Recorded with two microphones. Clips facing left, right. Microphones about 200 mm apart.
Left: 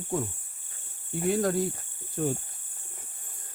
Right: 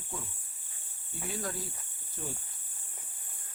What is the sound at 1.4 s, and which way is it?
Speech, 55° left (ahead or behind).